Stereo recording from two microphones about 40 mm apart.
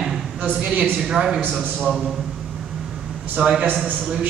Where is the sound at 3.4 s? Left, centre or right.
Right.